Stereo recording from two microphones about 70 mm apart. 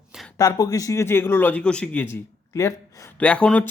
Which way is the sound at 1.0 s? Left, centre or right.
Left.